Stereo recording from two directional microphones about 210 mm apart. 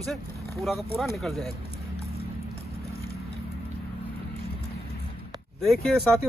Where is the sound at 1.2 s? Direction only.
Centre (ahead or behind).